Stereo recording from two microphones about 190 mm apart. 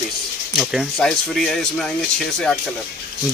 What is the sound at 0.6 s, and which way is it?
Speech, centre (ahead or behind).